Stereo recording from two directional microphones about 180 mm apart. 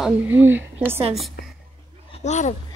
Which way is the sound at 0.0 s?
10° right (ahead or behind).